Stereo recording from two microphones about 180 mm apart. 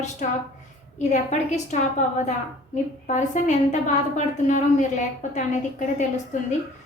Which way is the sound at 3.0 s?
40° left (ahead or behind).